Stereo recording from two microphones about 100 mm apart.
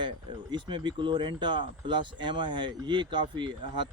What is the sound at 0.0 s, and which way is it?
Speech, 50° right (ahead or behind).